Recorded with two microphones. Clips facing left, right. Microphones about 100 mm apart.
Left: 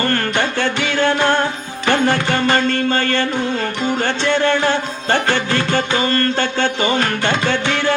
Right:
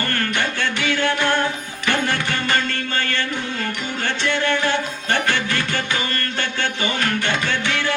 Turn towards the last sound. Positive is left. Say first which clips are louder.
# left 5 dB
turn(degrees=35)  # may be behind; listen again after turning